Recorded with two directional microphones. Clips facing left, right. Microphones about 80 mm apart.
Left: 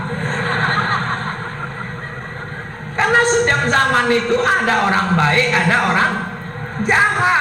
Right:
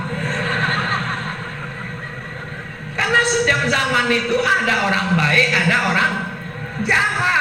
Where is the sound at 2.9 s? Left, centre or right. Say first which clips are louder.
Left 3 dB; left.